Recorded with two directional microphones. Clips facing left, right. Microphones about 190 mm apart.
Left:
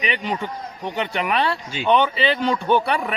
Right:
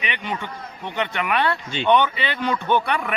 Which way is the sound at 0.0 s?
35° left (ahead or behind).